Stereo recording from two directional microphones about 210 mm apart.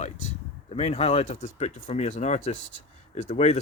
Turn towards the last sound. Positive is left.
turn(degrees=35)  # may be behind; listen again after turning